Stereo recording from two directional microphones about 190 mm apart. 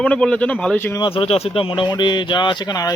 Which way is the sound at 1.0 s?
30° left (ahead or behind).